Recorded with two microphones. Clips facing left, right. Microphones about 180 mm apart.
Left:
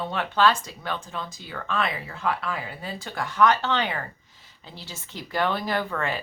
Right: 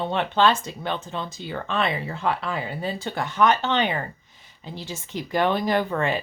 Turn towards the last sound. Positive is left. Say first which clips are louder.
# right 4 dB
turn(degrees=-20)  # may be behind; listen again after turning